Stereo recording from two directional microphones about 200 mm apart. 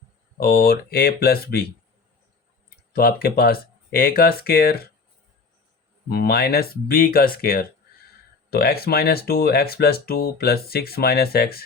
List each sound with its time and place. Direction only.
0.3 s speech: 50° left (ahead or behind)
2.9 s speech: 50° left (ahead or behind)
6.1 s speech: 50° left (ahead or behind)